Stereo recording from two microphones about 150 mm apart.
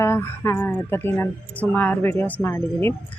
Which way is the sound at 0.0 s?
15° left (ahead or behind).